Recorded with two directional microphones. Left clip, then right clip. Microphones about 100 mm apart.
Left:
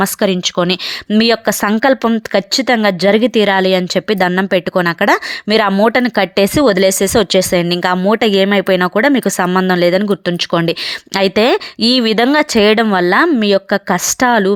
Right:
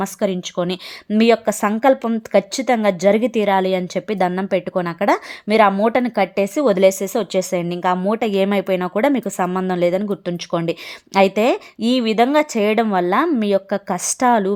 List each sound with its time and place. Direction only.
0.0 s a woman's voice: 35° left (ahead or behind)
6.4 s a woman's voice: 40° left (ahead or behind)
8.3 s speech: 20° left (ahead or behind)
8.6 s a woman's voice: 35° left (ahead or behind)
9.0 s speech: 20° left (ahead or behind)
9.4 s a woman's voice: 40° left (ahead or behind)
9.6 s speech: 30° left (ahead or behind)